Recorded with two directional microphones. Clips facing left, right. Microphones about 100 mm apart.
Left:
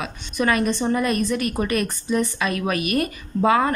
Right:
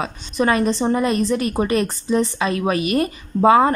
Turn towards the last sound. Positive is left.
turn(degrees=-25)  # may be behind; listen again after turning